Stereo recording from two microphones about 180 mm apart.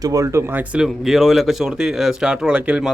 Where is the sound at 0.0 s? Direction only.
20° right (ahead or behind).